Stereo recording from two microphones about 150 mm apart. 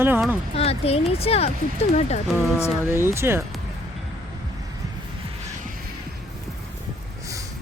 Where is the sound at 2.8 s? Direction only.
15° right (ahead or behind).